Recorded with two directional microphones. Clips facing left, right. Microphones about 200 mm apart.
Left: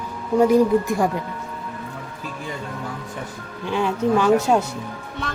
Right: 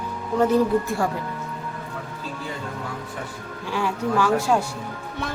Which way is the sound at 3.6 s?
20° left (ahead or behind).